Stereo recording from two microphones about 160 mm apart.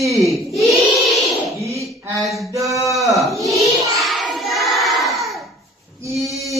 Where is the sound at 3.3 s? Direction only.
20° right (ahead or behind).